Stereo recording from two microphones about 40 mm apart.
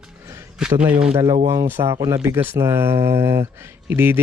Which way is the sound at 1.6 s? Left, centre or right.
Right.